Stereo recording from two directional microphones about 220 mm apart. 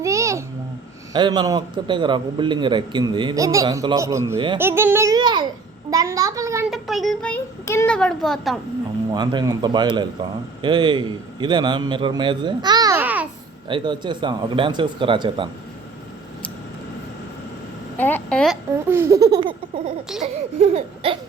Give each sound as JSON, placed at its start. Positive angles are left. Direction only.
{"t": 0.0, "sound": "babbling", "side_deg": -15}
{"t": 1.1, "sound": "a man's voice", "side_deg": -20}
{"t": 6.7, "sound": "a child's voice", "side_deg": 0}
{"t": 9.1, "sound": "a man's voice", "side_deg": -20}
{"t": 13.7, "sound": "a man's voice", "side_deg": -20}
{"t": 17.9, "sound": "a woman's voice", "side_deg": 10}
{"t": 18.9, "sound": "a child's voice", "side_deg": -10}
{"t": 20.6, "sound": "a man's voice", "side_deg": -25}